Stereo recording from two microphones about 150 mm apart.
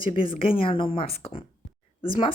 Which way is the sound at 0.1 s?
35° left (ahead or behind).